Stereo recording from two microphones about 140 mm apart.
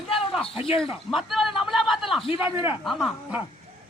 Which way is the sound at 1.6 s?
Centre (ahead or behind).